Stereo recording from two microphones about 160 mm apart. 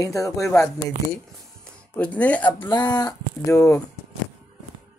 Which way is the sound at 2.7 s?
25° left (ahead or behind).